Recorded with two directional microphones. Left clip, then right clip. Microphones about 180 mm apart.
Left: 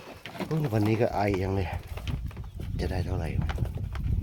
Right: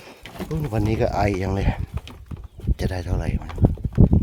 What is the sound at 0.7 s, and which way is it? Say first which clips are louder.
Speech: right 3 dB; 20° right (ahead or behind).